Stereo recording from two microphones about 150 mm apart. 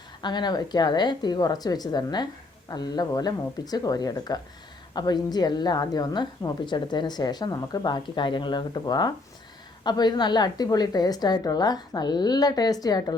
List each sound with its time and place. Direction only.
0.2 s a woman's voice: 30° left (ahead or behind)